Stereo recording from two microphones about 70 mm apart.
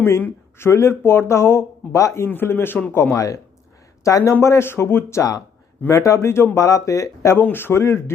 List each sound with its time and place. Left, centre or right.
0.0 s speech: left
2.2 s speech: left
3.2 s speech: left
5.9 s speech: left
7.3 s speech: left